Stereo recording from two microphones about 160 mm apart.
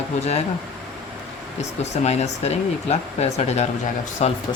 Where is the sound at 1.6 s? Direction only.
45° left (ahead or behind).